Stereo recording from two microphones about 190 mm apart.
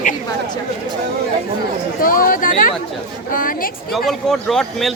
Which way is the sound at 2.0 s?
50° left (ahead or behind).